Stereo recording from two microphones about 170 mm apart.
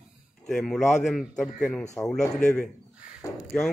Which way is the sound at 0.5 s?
5° left (ahead or behind).